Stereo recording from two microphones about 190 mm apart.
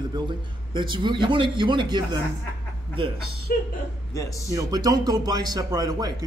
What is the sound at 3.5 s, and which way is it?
Speech, 50° left (ahead or behind).